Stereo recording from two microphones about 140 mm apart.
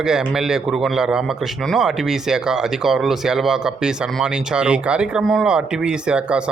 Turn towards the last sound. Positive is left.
turn(degrees=-5)  # may be behind; listen again after turning